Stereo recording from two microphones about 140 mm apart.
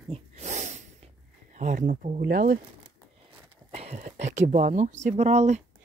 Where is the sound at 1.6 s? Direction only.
65° right (ahead or behind); by 2.6 s 85° right.